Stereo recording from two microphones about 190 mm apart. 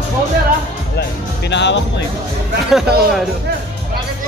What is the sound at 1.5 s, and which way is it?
Speech, 65° left (ahead or behind).